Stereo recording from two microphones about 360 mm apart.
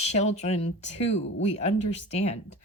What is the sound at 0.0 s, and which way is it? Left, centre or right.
Speech, centre.